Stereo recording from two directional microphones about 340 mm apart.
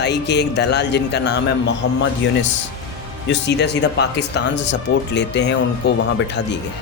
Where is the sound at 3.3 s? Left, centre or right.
Left.